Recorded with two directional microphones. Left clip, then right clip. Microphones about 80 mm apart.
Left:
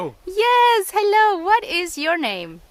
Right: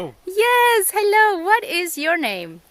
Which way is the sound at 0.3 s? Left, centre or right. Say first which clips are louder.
Even; right.